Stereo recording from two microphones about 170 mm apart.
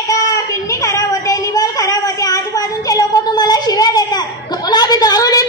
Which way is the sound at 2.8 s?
25° left (ahead or behind).